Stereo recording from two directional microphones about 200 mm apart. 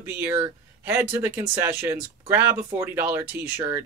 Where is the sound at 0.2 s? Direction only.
15° right (ahead or behind).